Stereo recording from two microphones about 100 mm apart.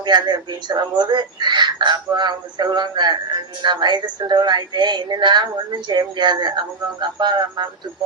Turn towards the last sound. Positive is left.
turn(degrees=-45)  # may be behind; listen again after turning